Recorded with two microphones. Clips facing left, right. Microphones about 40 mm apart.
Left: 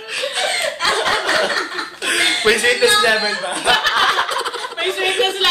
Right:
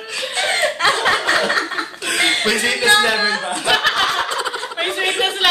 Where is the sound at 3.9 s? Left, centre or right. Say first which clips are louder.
Left 3 dB; centre.